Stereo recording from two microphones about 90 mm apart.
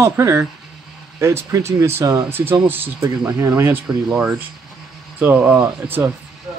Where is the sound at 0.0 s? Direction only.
30° right (ahead or behind).